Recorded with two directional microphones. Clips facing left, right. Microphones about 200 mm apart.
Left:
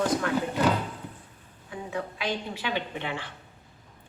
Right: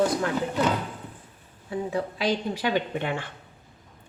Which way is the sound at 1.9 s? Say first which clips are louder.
Right 4 dB; 35° right (ahead or behind).